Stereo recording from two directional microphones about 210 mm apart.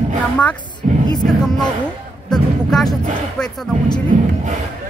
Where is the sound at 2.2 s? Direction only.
Centre (ahead or behind).